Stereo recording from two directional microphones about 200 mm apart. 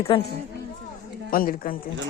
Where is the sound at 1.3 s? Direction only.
45° left (ahead or behind).